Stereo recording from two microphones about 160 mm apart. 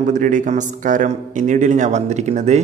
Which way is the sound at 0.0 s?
50° right (ahead or behind).